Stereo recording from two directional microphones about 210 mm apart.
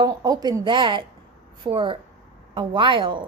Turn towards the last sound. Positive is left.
turn(degrees=-25)  # may be behind; listen again after turning